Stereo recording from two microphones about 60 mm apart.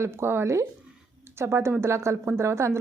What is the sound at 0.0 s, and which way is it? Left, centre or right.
A woman's voice, right.